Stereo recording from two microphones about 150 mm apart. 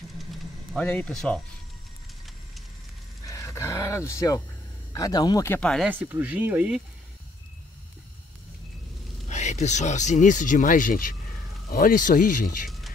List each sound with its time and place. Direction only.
0.3 s a sound: 10° left (ahead or behind)
3.3 s roaring cats: 20° left (ahead or behind)
4.9 s speech: 25° left (ahead or behind)
5.5 s speech: 5° left (ahead or behind)
5.9 s speech: 15° right (ahead or behind)
9.3 s speech: 50° left (ahead or behind)